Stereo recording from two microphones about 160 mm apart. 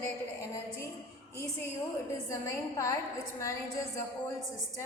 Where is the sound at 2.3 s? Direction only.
20° left (ahead or behind).